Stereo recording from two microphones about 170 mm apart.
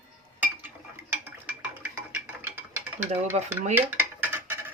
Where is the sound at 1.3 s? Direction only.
10° right (ahead or behind).